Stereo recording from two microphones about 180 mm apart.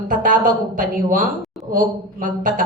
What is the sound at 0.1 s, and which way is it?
A woman's voice, 50° right (ahead or behind).